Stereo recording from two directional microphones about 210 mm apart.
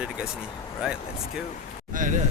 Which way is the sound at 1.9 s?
40° right (ahead or behind).